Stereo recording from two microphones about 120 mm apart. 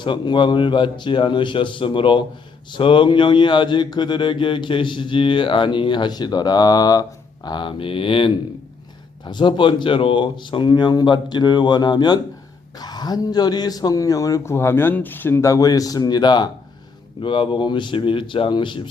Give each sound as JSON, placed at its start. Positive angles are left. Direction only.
{"t": 0.0, "sound": "a man's voice", "side_deg": 40}